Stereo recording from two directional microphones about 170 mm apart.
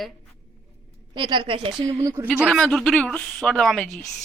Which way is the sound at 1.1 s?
30° right (ahead or behind).